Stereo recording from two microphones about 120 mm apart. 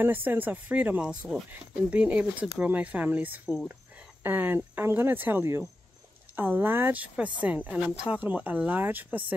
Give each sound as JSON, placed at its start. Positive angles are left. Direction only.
{"t": 0.0, "sound": "speech", "side_deg": -15}